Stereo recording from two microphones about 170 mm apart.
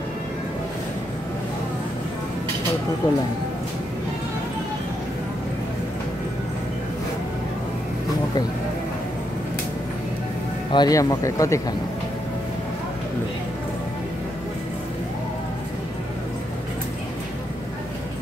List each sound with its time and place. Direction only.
3.0 s speech: 25° left (ahead or behind)
10.7 s speech: 25° left (ahead or behind)